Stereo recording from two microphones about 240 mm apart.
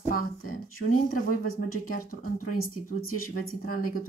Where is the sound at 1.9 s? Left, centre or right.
Left.